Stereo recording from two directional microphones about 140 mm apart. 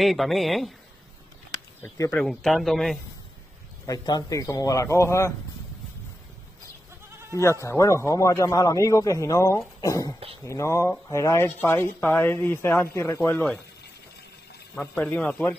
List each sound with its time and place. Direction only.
0.0 s a man's voice: centre (ahead or behind)
1.8 s speech: 20° left (ahead or behind)
2.2 s a man's voice: centre (ahead or behind)
3.8 s speech: 25° left (ahead or behind)
7.6 s speech: 20° left (ahead or behind)
14.8 s speech: 10° left (ahead or behind)